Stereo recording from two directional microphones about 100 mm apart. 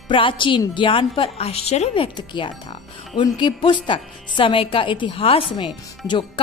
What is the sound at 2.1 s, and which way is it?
Speech, 55° left (ahead or behind).